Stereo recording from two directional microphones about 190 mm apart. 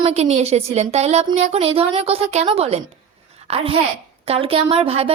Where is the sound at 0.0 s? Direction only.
35° right (ahead or behind).